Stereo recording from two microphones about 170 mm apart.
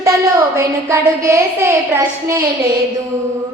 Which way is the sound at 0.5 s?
15° right (ahead or behind).